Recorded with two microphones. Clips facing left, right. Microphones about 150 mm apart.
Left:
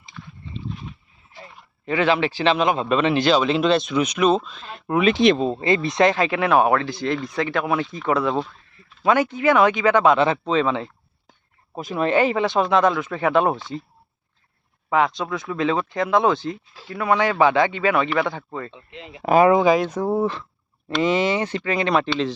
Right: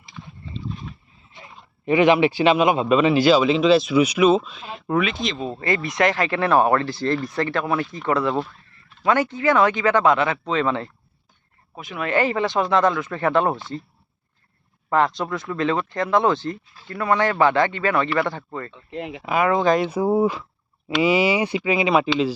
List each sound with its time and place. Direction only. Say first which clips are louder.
1.3 s speech: left 2 dB; 20° right (ahead or behind); by 4.9 s 5° right (ahead or behind)
5.1 s speech: left 11 dB; 65° left (ahead or behind)
5.4 s speech: left 4 dB; 25° left (ahead or behind)
6.5 s speech: right 1 dB; 5° left (ahead or behind)
9.3 s speech: left 1 dB; 15° left (ahead or behind)
10.6 s speech: left 1 dB; 5° left (ahead or behind)
11.7 s speech: left 6 dB; 35° left (ahead or behind)
12.1 s speech: even; 15° left (ahead or behind)
14.8 s speech: even; 5° left (ahead or behind)
19.2 s speech: left 7 dB; 40° left (ahead or behind)
19.6 s speech: left 1 dB; centre (ahead or behind)
19.9 s speech: right 2 dB; 10° right (ahead or behind)